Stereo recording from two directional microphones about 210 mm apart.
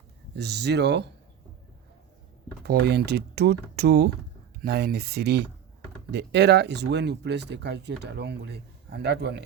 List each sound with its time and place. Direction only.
0.3 s speech: 55° right (ahead or behind)
2.6 s speech: 50° right (ahead or behind)